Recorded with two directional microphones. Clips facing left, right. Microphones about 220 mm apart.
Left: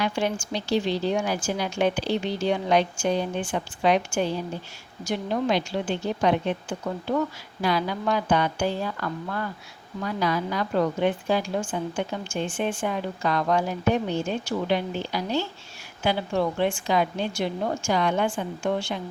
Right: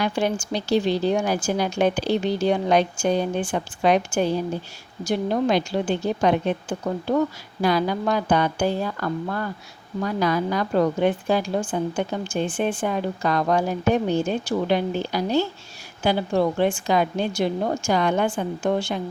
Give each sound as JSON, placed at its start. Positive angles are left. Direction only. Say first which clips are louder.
{"t": 0.0, "sound": "a woman's voice", "louder": "right 3 dB", "side_deg": -40}